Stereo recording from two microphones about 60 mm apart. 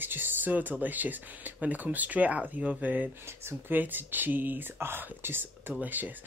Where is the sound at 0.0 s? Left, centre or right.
Right.